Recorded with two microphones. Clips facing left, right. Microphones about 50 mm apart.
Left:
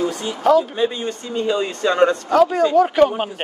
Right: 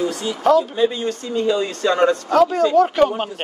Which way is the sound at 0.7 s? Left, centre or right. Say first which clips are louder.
Right 2 dB; left.